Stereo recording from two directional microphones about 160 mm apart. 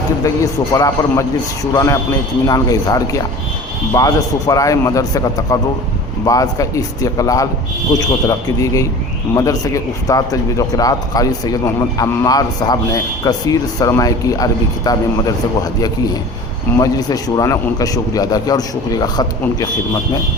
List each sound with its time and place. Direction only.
0.3 s a man's voice: 20° left (ahead or behind)
16.7 s a man's voice: 25° left (ahead or behind)